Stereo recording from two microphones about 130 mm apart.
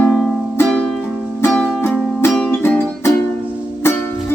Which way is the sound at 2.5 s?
15° left (ahead or behind).